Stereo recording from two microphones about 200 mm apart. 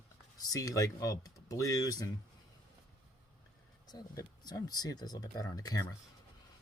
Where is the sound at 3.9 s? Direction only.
20° left (ahead or behind).